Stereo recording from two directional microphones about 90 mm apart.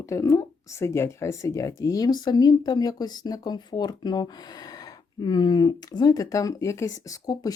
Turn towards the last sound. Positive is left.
turn(degrees=40)  # may be behind; listen again after turning